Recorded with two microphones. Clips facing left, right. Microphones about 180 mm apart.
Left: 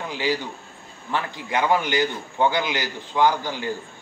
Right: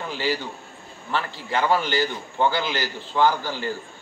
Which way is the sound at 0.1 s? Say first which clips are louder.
Left 1 dB; 15° left (ahead or behind).